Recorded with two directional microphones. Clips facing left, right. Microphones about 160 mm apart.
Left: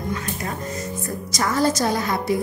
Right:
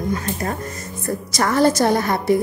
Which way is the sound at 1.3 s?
65° right (ahead or behind).